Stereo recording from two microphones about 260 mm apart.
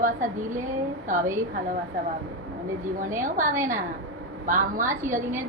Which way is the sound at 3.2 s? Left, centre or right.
Right.